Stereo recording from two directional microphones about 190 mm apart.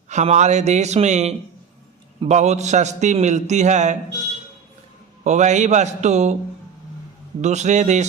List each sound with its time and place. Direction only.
0.1 s a man's voice: 40° right (ahead or behind)
5.2 s a man's voice: 40° right (ahead or behind)
7.4 s a man's voice: 40° right (ahead or behind)